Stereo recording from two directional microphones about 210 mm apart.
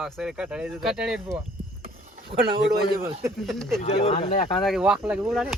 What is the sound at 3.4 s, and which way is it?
Speech, centre (ahead or behind).